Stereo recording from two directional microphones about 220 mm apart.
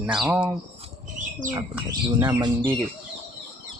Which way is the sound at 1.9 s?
15° right (ahead or behind).